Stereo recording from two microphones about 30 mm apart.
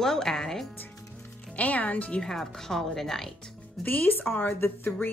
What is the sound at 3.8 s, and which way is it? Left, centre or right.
Speech, left.